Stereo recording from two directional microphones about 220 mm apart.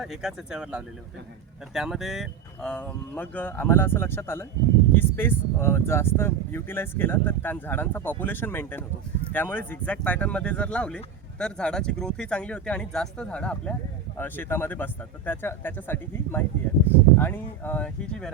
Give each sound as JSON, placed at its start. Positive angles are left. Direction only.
{"t": 0.0, "sound": "speech", "side_deg": 0}